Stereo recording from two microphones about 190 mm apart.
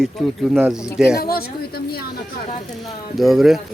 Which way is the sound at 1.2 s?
50° left (ahead or behind).